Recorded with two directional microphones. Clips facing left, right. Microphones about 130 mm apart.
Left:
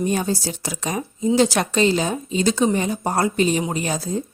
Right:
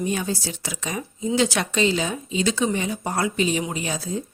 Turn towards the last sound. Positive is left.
turn(degrees=40)  # may be behind; listen again after turning